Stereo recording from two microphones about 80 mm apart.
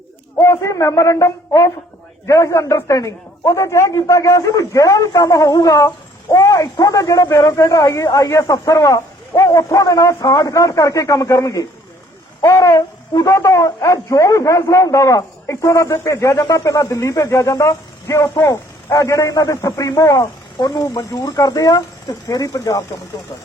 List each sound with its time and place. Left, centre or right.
0.3 s speech: left